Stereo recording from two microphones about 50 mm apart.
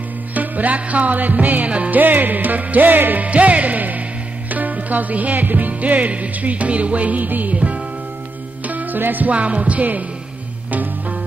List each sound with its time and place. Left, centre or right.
0.3 s music: right